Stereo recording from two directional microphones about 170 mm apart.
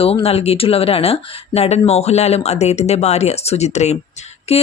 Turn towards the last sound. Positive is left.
turn(degrees=35)  # may be behind; listen again after turning